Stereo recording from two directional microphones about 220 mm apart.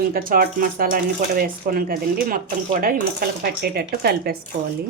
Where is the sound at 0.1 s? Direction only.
40° right (ahead or behind).